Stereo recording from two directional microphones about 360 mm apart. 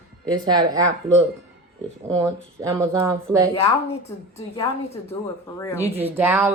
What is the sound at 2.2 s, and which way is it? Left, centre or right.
Speech, centre.